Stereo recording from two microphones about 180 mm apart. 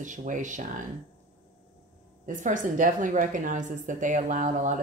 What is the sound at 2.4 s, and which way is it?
Speech, 45° right (ahead or behind).